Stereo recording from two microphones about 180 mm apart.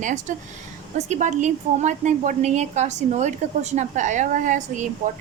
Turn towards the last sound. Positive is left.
turn(degrees=-45)  # may be behind; listen again after turning